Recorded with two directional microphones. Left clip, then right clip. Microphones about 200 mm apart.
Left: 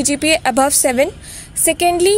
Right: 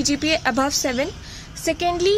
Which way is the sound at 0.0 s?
40° left (ahead or behind).